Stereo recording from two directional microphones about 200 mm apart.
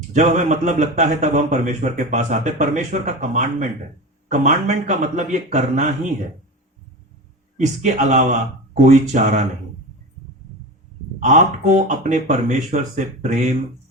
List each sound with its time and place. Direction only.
0.1 s a man's voice: 35° right (ahead or behind)
7.5 s a man's voice: 40° right (ahead or behind)
11.2 s a man's voice: 35° right (ahead or behind)